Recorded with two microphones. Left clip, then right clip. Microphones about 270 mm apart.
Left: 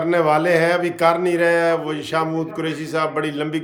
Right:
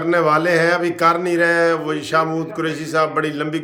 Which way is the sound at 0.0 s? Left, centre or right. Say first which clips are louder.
Right 1 dB; centre.